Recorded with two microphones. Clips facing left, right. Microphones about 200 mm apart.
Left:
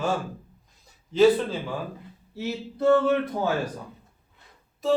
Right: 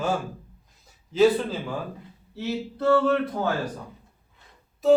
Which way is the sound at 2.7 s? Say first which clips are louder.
Left 1 dB; 20° left (ahead or behind).